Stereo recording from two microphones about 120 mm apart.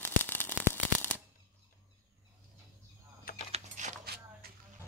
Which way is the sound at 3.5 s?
80° right.